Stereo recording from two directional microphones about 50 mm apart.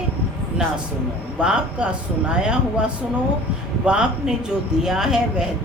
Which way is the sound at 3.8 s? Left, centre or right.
Right.